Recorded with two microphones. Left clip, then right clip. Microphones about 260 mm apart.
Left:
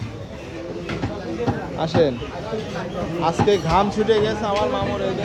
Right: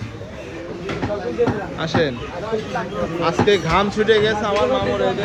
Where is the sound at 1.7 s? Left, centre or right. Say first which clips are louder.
Left 3 dB; centre.